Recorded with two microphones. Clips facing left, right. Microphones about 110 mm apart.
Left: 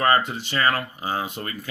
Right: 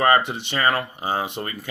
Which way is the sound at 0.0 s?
20° right (ahead or behind).